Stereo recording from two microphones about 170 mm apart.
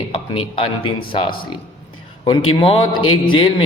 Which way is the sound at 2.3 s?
35° left (ahead or behind).